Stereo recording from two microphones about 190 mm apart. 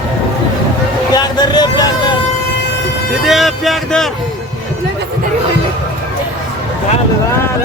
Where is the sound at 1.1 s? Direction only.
20° left (ahead or behind).